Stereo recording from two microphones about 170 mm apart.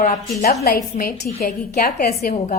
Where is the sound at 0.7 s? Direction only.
65° left (ahead or behind); by 2.5 s 45° left (ahead or behind).